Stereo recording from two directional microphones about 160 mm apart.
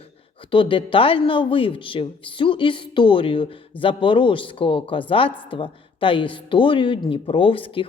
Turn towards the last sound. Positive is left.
turn(degrees=35)  # may be behind; listen again after turning